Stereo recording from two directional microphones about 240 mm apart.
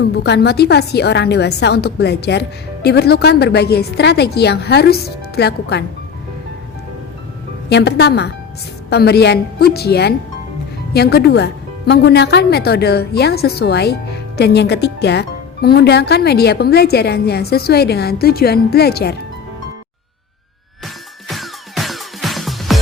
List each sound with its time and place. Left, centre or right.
0.2 s a woman's voice: left
7.7 s a woman's voice: left
20.8 s music: centre